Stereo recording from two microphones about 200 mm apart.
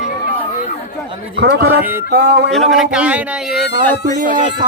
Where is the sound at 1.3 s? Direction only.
60° right (ahead or behind).